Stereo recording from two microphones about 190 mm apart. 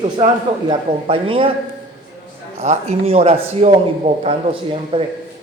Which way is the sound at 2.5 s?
35° right (ahead or behind).